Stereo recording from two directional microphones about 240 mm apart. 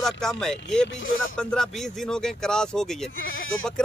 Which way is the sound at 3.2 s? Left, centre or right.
Left.